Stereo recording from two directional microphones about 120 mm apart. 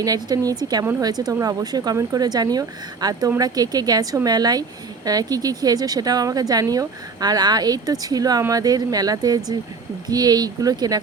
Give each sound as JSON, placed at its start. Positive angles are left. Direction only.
{"t": 0.0, "sound": "speech", "side_deg": -30}